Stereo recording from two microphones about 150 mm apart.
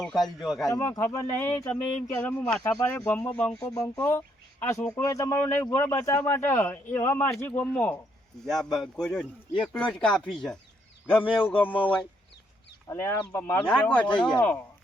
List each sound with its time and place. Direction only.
0.0 s speech: centre (ahead or behind)
0.7 s speech: 25° left (ahead or behind)
3.8 s speech: 20° left (ahead or behind)
12.9 s speech: 15° left (ahead or behind)